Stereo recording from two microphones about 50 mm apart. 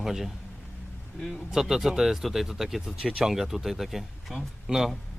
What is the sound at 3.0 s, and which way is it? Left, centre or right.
Speech, centre.